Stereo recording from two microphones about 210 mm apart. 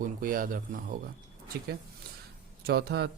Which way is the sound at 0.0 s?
40° right (ahead or behind).